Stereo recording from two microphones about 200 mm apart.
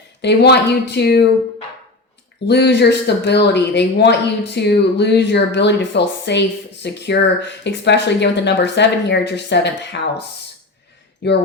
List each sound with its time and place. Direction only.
0.2 s speech: 60° left (ahead or behind)
2.5 s speech: 55° left (ahead or behind)